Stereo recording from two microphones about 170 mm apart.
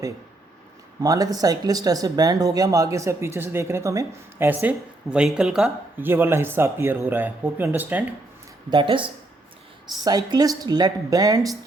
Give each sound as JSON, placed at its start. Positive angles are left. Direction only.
{"t": 1.0, "sound": "speech", "side_deg": -20}
{"t": 8.7, "sound": "speech", "side_deg": -30}